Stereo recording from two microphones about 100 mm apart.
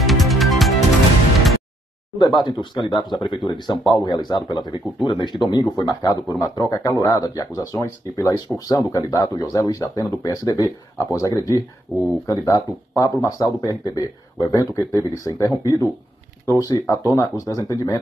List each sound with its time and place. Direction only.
0.0 s music: centre (ahead or behind)
2.1 s speech: 45° left (ahead or behind)